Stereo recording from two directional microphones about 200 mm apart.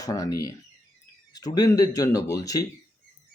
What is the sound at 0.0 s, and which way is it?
Speech, 15° left (ahead or behind).